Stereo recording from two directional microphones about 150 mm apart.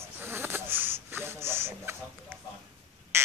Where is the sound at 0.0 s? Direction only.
15° right (ahead or behind).